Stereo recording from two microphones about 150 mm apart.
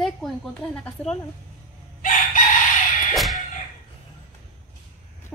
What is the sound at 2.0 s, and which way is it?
Chicken, 60° left (ahead or behind).